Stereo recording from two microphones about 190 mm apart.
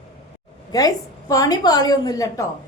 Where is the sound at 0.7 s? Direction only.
20° left (ahead or behind).